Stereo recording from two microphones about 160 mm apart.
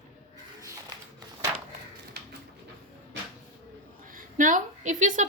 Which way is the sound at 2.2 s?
90° right.